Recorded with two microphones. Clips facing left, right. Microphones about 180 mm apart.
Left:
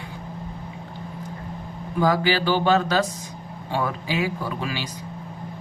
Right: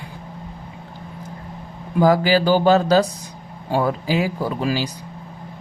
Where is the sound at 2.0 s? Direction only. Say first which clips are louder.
Right 5 dB; 40° right (ahead or behind).